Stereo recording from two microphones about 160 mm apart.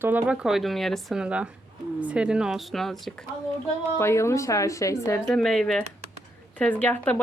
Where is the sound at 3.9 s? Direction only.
15° left (ahead or behind).